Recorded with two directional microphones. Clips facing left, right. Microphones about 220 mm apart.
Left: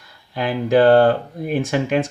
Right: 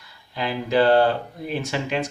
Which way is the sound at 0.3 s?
50° left (ahead or behind).